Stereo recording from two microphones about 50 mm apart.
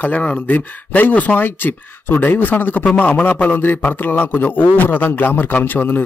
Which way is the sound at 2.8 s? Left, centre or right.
Left.